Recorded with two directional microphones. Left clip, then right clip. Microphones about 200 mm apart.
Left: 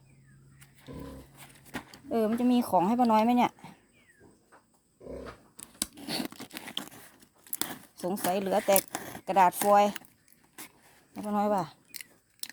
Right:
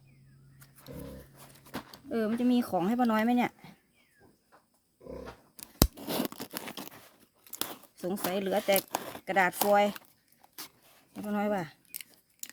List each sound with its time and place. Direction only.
2.0 s speech: 5° left (ahead or behind)
3.2 s speech: 30° right (ahead or behind)
5.5 s scissors: 40° right (ahead or behind)
6.1 s crunch: 20° right (ahead or behind)
8.0 s speech: centre (ahead or behind)
11.3 s speech: 5° right (ahead or behind)